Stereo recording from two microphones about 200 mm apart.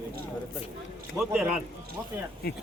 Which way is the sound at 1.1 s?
5° right (ahead or behind).